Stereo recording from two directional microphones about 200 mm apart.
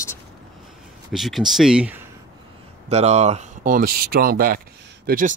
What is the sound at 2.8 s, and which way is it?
Speech, 35° right (ahead or behind).